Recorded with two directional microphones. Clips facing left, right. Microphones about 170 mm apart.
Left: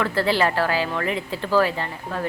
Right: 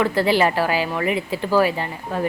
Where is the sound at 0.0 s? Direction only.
15° right (ahead or behind).